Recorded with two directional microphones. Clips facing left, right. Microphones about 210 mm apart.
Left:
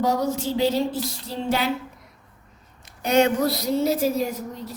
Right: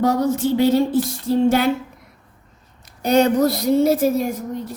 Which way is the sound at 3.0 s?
35° right (ahead or behind).